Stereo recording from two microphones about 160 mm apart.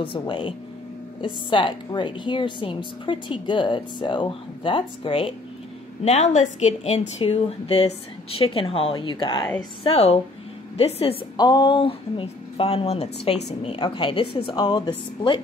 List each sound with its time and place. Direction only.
0.3 s a woman's voice: 30° left (ahead or behind)
6.0 s a woman's voice: 45° left (ahead or behind)
11.3 s a woman's voice: 25° left (ahead or behind)